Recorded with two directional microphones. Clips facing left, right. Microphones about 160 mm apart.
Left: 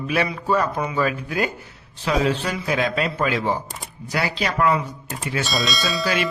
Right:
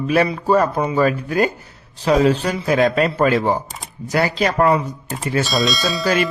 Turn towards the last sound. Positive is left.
turn(degrees=0)  # may be behind; listen again after turning